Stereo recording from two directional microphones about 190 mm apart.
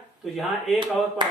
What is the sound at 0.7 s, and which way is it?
Speech, 25° right (ahead or behind).